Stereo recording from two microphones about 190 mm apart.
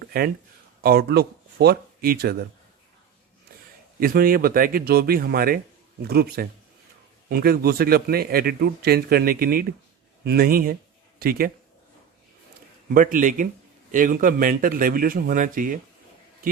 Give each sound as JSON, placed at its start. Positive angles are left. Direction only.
{"t": 0.0, "sound": "a sound", "side_deg": -50}
{"t": 0.8, "sound": "speech", "side_deg": -55}
{"t": 4.0, "sound": "a man's voice", "side_deg": -50}
{"t": 12.9, "sound": "a man's voice", "side_deg": -45}